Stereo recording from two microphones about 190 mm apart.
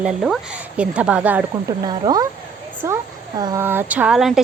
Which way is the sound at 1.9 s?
20° right (ahead or behind).